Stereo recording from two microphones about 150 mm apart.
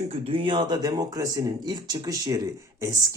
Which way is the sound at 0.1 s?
35° right (ahead or behind).